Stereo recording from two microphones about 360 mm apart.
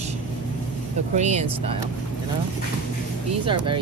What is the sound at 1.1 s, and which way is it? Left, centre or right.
Speech, centre.